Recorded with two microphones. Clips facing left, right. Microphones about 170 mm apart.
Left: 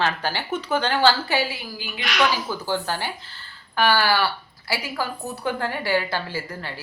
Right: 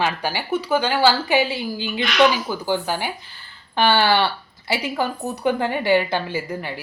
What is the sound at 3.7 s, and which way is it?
A woman's voice, 25° right (ahead or behind).